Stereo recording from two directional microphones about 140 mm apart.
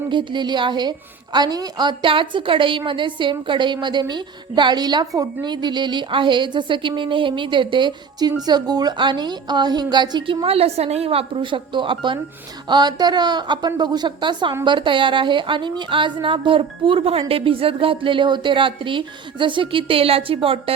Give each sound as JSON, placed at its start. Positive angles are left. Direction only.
{"t": 0.1, "sound": "a woman's voice", "side_deg": -35}